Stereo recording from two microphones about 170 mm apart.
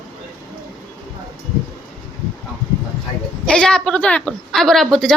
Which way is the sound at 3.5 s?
5° left (ahead or behind).